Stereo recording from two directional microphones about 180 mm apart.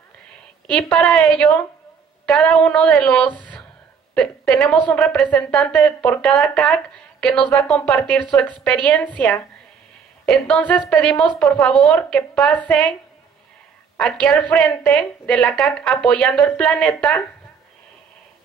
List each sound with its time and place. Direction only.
0.9 s a woman's voice: 5° left (ahead or behind)
14.2 s a woman's voice: 5° left (ahead or behind)